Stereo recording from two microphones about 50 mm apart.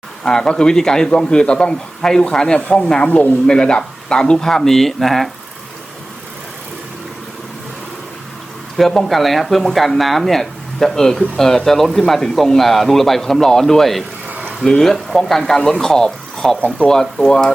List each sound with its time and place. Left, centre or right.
0.3 s a man's voice: centre
3.0 s speech: left
3.4 s a man's voice: centre
9.0 s a man's voice: centre
16.6 s speech: left
16.8 s a man's voice: centre